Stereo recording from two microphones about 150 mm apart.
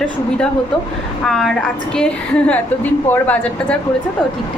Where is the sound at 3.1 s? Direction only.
10° left (ahead or behind).